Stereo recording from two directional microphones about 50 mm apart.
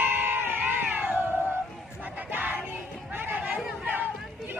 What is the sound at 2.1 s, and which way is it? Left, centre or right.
Music, right.